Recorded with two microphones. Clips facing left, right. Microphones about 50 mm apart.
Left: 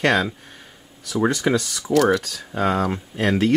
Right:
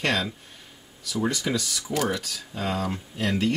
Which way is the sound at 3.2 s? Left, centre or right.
Left.